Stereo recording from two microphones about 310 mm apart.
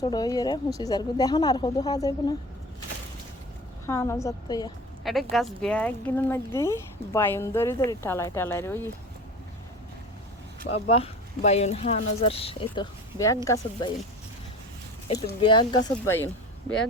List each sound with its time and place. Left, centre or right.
0.0 s speech: centre
3.8 s speech: centre
5.0 s speech: centre
10.7 s speech: centre
15.1 s speech: centre